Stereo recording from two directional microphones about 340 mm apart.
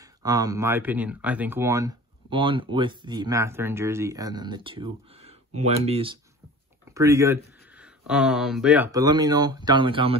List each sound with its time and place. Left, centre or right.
0.0 s speech: centre